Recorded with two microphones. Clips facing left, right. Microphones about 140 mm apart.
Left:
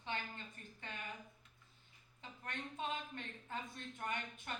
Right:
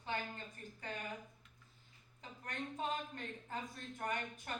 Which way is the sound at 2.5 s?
40° right (ahead or behind).